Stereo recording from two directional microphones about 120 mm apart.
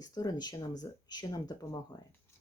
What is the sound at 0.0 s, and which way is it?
Speech, 30° left (ahead or behind).